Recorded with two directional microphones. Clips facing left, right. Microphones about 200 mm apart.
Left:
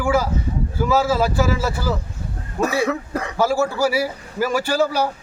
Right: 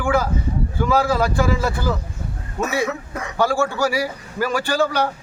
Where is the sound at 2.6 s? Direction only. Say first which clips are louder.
Left 2 dB; 35° left (ahead or behind).